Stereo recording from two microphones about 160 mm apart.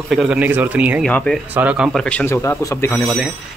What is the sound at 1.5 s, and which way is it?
Speech, 10° right (ahead or behind).